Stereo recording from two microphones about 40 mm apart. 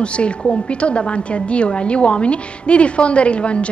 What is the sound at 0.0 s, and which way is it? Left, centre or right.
A woman's voice, left.